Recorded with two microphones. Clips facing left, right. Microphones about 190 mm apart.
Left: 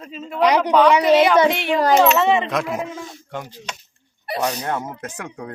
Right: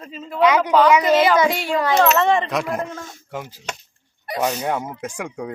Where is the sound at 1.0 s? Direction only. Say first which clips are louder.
Left 2 dB; centre (ahead or behind).